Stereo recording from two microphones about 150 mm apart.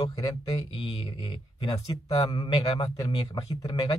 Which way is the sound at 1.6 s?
30° left (ahead or behind).